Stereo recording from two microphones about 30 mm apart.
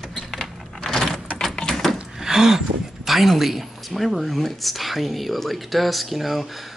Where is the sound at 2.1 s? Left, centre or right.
Centre.